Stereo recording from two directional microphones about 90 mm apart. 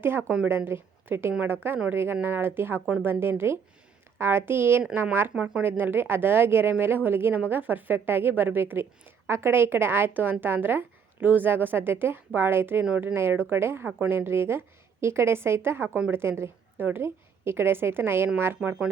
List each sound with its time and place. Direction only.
0.0 s a woman's voice: 25° right (ahead or behind)
5.3 s speech: 10° right (ahead or behind)
5.6 s a woman's voice: 25° right (ahead or behind)
12.8 s speech: 10° right (ahead or behind)
13.1 s a woman's voice: 25° right (ahead or behind)